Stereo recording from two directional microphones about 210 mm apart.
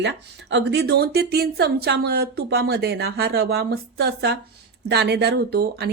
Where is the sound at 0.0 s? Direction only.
55° right (ahead or behind).